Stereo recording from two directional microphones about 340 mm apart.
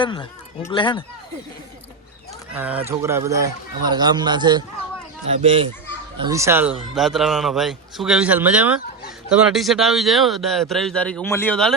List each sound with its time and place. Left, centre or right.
0.0 s speech: centre
2.5 s speech: centre